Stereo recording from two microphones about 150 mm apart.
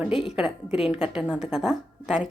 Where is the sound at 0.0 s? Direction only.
Centre (ahead or behind).